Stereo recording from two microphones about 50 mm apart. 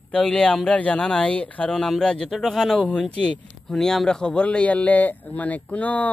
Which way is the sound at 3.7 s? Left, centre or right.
Centre.